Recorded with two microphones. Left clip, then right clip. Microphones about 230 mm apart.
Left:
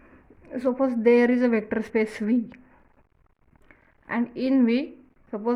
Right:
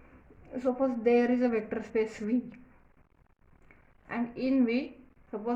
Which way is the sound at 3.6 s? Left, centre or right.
Left.